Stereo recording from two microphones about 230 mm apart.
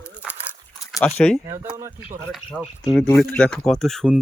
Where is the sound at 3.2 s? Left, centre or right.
Centre.